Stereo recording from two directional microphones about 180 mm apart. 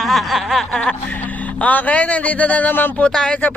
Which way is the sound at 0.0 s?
Centre (ahead or behind).